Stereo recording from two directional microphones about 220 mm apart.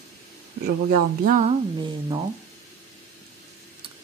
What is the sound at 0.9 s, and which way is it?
Speech, 35° right (ahead or behind).